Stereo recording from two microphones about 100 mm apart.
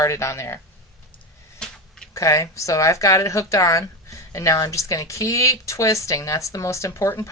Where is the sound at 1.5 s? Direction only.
5° left (ahead or behind).